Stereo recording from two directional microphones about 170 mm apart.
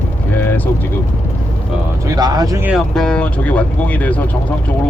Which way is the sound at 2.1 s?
25° right (ahead or behind).